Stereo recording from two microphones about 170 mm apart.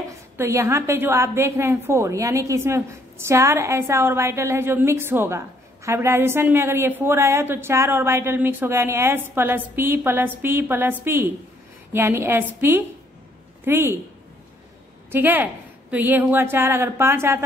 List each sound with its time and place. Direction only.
0.4 s a woman's voice: 15° right (ahead or behind)
15.0 s a woman's voice: 10° right (ahead or behind)